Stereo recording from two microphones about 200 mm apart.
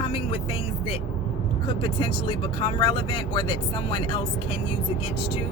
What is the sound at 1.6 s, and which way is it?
Speech, 20° left (ahead or behind).